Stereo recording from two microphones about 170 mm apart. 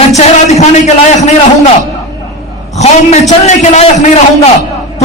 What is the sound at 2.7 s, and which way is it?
A man's voice, 40° left (ahead or behind).